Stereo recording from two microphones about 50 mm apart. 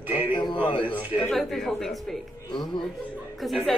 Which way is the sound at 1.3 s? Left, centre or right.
Centre.